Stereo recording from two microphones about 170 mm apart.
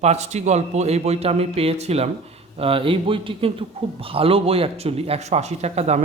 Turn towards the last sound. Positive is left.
turn(degrees=-40)  # may be behind; listen again after turning